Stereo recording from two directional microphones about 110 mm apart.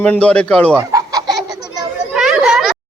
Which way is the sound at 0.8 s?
35° right (ahead or behind).